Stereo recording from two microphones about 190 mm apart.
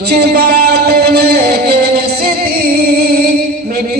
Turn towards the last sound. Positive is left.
turn(degrees=-55)  # may be behind; listen again after turning